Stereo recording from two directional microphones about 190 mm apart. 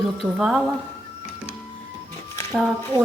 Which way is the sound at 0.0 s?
5° right (ahead or behind).